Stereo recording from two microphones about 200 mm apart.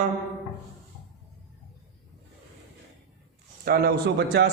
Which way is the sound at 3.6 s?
50° right (ahead or behind).